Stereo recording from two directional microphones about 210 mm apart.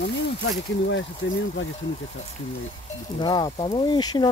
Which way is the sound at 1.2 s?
60° left (ahead or behind).